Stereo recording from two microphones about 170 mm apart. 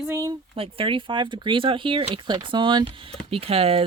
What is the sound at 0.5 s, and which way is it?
Speech, 35° right (ahead or behind).